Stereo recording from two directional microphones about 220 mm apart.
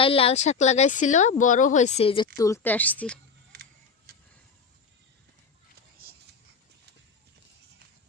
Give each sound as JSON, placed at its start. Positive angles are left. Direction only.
{"t": 0.0, "sound": "speech", "side_deg": 25}
{"t": 3.5, "sound": "single-lens reflex camera", "side_deg": -45}